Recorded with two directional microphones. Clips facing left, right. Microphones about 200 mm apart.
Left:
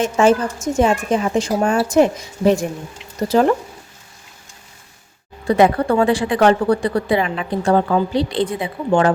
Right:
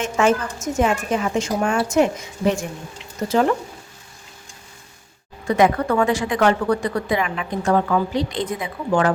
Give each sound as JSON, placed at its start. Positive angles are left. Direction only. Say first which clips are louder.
{"t": 0.0, "sound": "a woman's voice", "louder": "left 4 dB", "side_deg": 35}
{"t": 5.5, "sound": "a woman's voice", "louder": "left 3 dB", "side_deg": 30}